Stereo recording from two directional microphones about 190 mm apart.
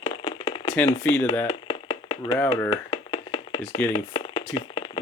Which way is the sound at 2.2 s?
20° left (ahead or behind).